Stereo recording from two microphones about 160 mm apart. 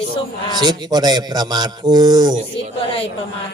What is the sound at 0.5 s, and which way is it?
A man's voice, 25° right (ahead or behind).